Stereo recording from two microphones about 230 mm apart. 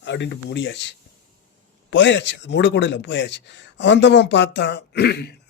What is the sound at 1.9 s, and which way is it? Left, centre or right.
A man's voice, left.